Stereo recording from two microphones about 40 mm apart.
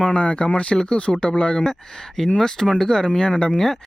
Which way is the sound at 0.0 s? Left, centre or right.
Left.